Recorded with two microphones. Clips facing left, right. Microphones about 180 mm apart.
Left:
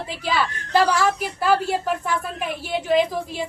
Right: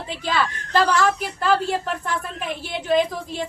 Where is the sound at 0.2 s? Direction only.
10° left (ahead or behind).